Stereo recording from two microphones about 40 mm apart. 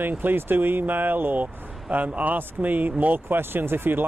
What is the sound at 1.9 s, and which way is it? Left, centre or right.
Speech, right.